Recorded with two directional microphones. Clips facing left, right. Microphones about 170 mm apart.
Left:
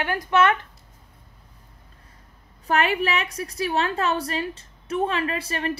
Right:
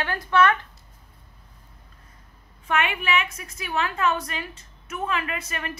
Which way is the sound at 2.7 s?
35° left (ahead or behind).